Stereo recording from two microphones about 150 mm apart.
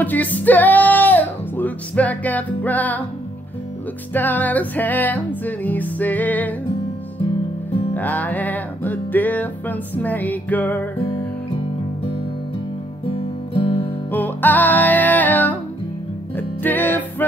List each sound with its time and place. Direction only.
0.0 s music: 10° left (ahead or behind)
4.1 s music: 10° left (ahead or behind)
7.2 s music: 35° left (ahead or behind)
7.9 s music: 10° left (ahead or behind)
13.1 s music: 35° left (ahead or behind)
14.1 s music: 10° left (ahead or behind)